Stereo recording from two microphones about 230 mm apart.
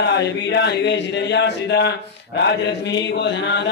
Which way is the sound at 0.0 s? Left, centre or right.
Left.